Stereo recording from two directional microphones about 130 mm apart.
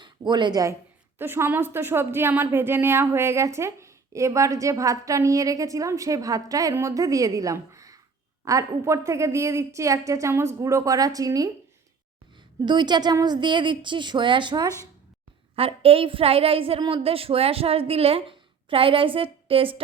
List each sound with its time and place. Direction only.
0.0 s speech: 35° right (ahead or behind)
1.2 s a woman's voice: 15° right (ahead or behind)
12.6 s speech: 35° right (ahead or behind)
15.5 s a woman's voice: 45° right (ahead or behind)